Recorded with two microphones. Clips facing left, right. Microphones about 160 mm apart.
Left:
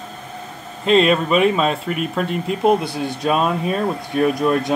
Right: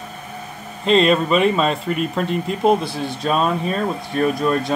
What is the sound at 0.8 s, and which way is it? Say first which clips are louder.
Speech: even; 5° left (ahead or behind).